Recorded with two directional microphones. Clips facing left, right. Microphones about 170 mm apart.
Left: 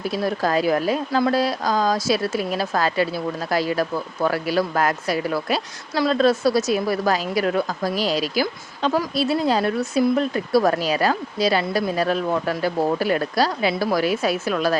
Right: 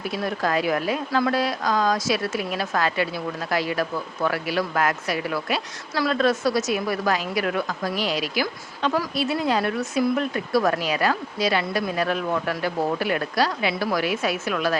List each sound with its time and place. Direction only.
0.0 s speech: 35° left (ahead or behind)